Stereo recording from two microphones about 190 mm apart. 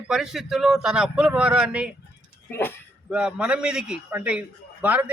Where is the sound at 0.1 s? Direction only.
Centre (ahead or behind).